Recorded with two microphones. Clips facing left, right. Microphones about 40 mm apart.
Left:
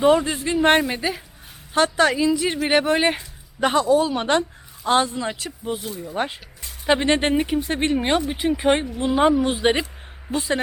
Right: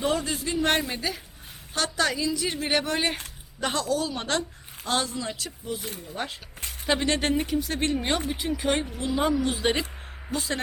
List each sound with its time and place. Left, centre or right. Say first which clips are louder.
0.0 s speech: left 9 dB; left